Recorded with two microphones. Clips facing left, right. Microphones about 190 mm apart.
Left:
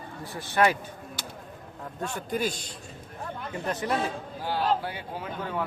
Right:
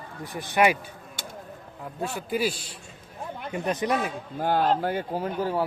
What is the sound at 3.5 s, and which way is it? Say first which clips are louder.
Speech: right 3 dB; 20° right (ahead or behind).